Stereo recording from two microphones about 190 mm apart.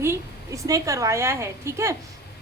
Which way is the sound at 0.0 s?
15° right (ahead or behind).